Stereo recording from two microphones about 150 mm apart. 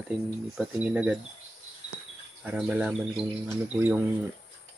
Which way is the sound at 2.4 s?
10° right (ahead or behind).